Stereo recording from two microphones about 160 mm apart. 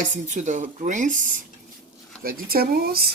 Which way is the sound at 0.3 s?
50° right (ahead or behind).